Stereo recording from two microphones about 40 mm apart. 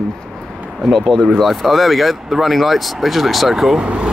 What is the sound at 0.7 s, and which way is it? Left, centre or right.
Speech, centre.